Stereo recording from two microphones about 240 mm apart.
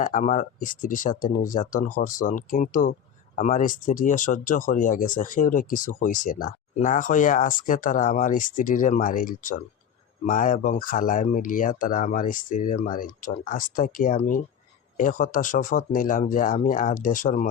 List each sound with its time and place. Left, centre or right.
0.0 s speech: left